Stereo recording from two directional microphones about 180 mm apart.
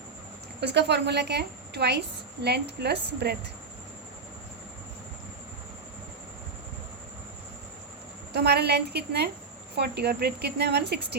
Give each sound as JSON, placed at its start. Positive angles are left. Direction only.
{"t": 0.6, "sound": "a woman's voice", "side_deg": -70}
{"t": 8.3, "sound": "speech", "side_deg": -65}